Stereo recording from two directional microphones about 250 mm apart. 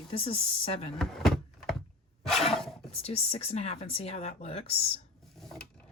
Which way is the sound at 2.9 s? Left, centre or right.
Left.